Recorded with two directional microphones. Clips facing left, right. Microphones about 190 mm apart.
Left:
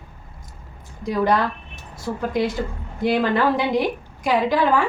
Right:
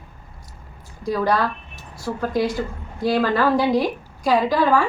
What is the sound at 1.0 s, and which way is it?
A woman's voice, 20° left (ahead or behind).